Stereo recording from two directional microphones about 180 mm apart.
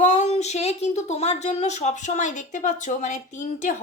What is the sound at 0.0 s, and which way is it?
A woman's voice, 40° left (ahead or behind).